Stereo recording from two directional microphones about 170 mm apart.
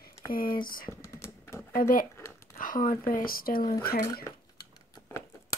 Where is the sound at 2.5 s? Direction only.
55° left (ahead or behind).